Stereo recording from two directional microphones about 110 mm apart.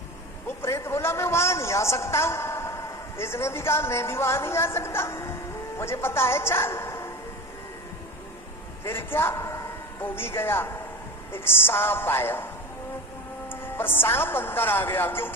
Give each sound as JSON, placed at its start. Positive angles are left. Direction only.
{"t": 0.4, "sound": "a man's voice", "side_deg": 25}
{"t": 8.8, "sound": "a man's voice", "side_deg": 20}
{"t": 13.5, "sound": "a woman's voice", "side_deg": 20}